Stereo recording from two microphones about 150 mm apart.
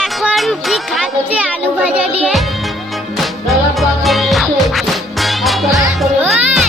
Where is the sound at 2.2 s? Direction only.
Centre (ahead or behind).